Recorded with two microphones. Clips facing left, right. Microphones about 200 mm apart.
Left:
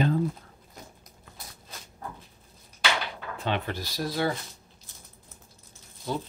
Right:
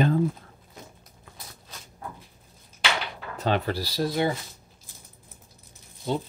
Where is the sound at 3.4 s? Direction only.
35° right (ahead or behind); by 4.3 s 20° right (ahead or behind).